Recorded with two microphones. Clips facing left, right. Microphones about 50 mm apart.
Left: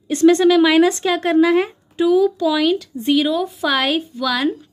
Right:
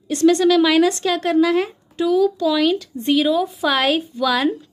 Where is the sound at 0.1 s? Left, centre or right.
Left.